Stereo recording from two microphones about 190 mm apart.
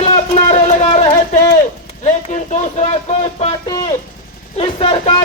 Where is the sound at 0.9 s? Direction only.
35° left (ahead or behind).